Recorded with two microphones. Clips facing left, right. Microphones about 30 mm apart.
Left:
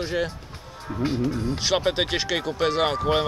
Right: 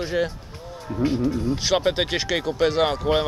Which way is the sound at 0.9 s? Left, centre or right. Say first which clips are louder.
Right 3 dB; centre.